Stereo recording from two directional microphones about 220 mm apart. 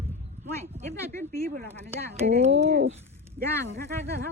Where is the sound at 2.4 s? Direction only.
30° right (ahead or behind).